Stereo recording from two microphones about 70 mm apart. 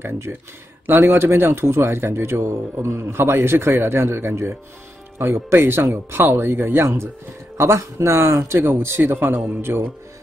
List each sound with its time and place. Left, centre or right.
0.0 s speech: right